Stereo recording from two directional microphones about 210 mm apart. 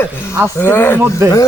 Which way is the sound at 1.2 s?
15° right (ahead or behind).